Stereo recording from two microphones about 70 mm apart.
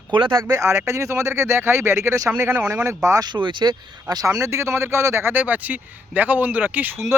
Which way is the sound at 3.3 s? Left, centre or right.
Right.